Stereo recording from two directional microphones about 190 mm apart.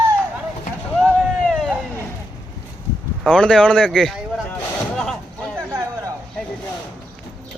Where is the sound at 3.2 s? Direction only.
5° left (ahead or behind).